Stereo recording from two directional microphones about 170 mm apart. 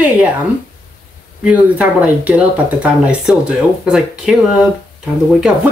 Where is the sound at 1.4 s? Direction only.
10° right (ahead or behind).